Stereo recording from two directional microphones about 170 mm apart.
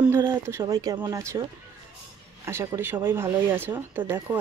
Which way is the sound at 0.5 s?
15° right (ahead or behind).